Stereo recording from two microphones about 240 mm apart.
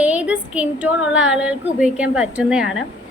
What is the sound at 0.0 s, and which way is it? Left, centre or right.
Speech, centre.